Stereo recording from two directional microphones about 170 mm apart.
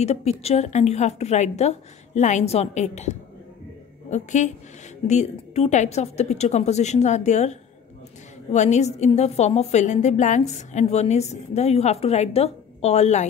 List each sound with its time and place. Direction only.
0.0 s a woman's voice: 40° left (ahead or behind)